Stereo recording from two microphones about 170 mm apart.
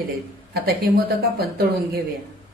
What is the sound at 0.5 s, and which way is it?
Speech, 65° right (ahead or behind).